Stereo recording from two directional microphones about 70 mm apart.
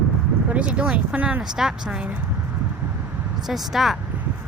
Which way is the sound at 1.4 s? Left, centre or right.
Centre.